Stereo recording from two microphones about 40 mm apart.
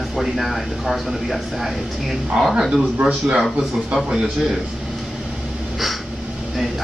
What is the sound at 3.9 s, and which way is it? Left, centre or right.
Speech, centre.